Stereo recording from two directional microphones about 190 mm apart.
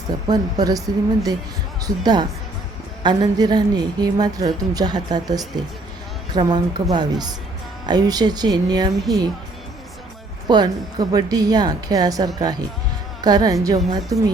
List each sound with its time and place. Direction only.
0.3 s a woman's voice: 20° right (ahead or behind)
1.8 s a woman's voice: 20° right (ahead or behind)
10.5 s a woman's voice: 20° right (ahead or behind)